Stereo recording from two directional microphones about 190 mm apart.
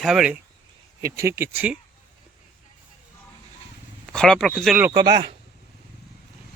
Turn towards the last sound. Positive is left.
turn(degrees=-20)  # may be behind; listen again after turning